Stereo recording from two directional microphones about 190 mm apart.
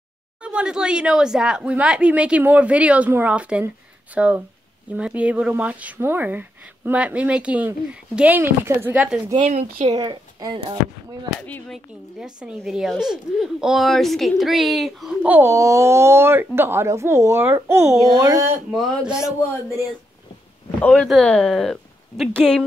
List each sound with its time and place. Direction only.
0.4 s speech: 5° right (ahead or behind)
9.8 s speech: 20° right (ahead or behind)
11.4 s speech: 5° left (ahead or behind); by 18.5 s 15° right (ahead or behind)
18.7 s speech: 5° right (ahead or behind)
20.8 s speech: 5° left (ahead or behind)